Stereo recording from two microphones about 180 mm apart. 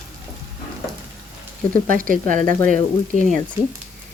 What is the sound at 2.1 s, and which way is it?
Speech, 45° right (ahead or behind).